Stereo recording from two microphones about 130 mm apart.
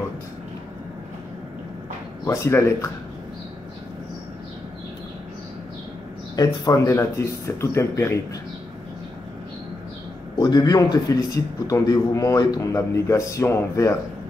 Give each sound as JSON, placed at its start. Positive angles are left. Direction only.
{"t": 2.2, "sound": "a man's voice", "side_deg": 20}
{"t": 6.3, "sound": "a man's voice", "side_deg": 30}
{"t": 10.4, "sound": "a man's voice", "side_deg": 30}